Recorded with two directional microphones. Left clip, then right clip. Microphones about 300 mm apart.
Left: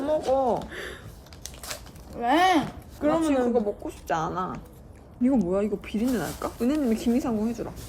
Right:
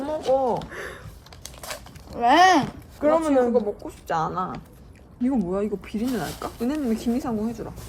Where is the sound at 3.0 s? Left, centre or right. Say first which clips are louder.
Right 4 dB; centre.